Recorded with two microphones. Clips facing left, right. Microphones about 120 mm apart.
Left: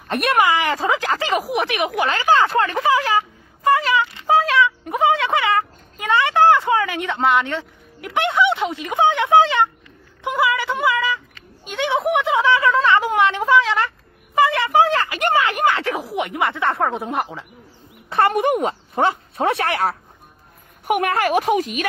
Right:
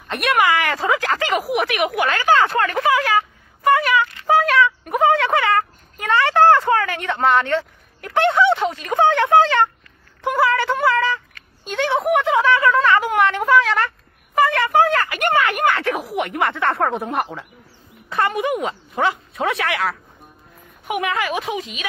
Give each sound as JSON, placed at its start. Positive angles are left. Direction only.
{"t": 0.1, "sound": "speech", "side_deg": 25}
{"t": 18.4, "sound": "speech", "side_deg": 40}
{"t": 20.8, "sound": "speech", "side_deg": 55}